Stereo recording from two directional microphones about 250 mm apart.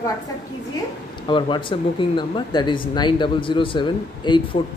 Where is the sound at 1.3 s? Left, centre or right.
Centre.